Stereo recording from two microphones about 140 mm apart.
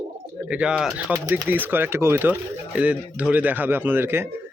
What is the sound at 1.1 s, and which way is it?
Speech, 20° right (ahead or behind).